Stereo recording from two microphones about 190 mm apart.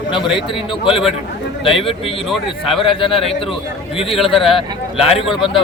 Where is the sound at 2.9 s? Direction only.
30° left (ahead or behind).